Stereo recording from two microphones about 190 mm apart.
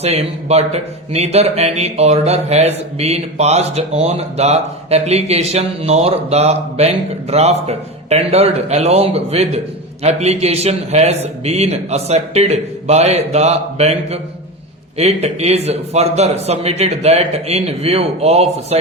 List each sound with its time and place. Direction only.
0.0 s speech: 35° right (ahead or behind)